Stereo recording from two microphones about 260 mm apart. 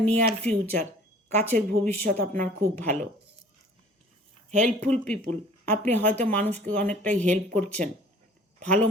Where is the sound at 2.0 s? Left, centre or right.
Right.